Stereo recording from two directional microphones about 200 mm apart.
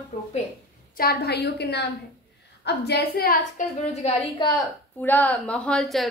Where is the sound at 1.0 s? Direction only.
50° left (ahead or behind).